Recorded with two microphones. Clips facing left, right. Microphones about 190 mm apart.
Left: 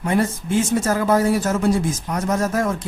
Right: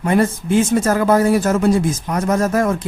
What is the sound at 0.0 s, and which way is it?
A man's voice, 55° right (ahead or behind).